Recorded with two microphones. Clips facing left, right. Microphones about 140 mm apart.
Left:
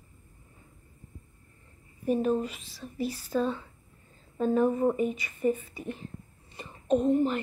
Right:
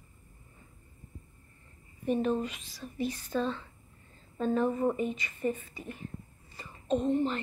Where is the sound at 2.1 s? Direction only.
5° left (ahead or behind).